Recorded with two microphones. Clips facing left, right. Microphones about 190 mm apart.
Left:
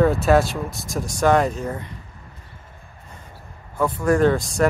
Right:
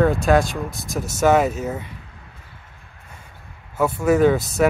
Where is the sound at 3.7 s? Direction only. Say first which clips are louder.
Right 2 dB; 10° right (ahead or behind).